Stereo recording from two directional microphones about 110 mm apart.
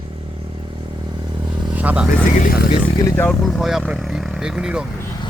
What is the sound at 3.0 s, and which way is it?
Speech, 25° left (ahead or behind).